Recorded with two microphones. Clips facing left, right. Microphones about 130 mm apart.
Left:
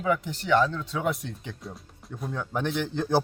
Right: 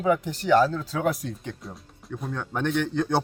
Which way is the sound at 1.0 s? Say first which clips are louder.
Right 3 dB; centre (ahead or behind).